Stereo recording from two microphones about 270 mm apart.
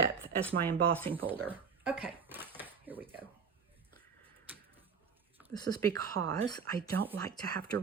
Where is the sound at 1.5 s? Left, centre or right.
Centre.